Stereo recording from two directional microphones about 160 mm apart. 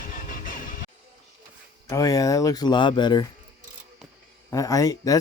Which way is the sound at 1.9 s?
20° left (ahead or behind).